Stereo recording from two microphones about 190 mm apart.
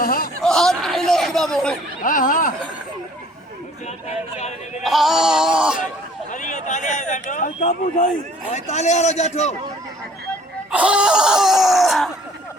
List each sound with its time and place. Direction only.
0.0 s a sound: 50° left (ahead or behind)
0.4 s a sound: 5° left (ahead or behind)
2.0 s speech: 45° left (ahead or behind)
4.4 s speech: 35° left (ahead or behind)
4.8 s screaming: centre (ahead or behind)
6.3 s speech: 40° left (ahead or behind)
10.7 s screaming: 5° right (ahead or behind)